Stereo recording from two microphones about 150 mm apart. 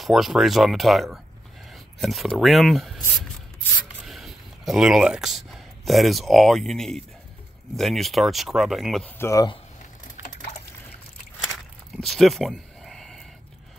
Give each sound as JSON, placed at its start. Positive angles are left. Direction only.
{"t": 0.0, "sound": "speech", "side_deg": 0}
{"t": 4.0, "sound": "speech", "side_deg": 0}
{"t": 9.2, "sound": "speech", "side_deg": 20}
{"t": 10.2, "sound": "liquid", "side_deg": 50}
{"t": 11.4, "sound": "a sound", "side_deg": 0}